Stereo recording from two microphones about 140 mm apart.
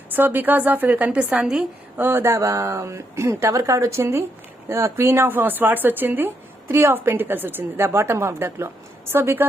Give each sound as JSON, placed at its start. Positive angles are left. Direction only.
{"t": 0.1, "sound": "speech", "side_deg": -15}
{"t": 2.0, "sound": "speech", "side_deg": -15}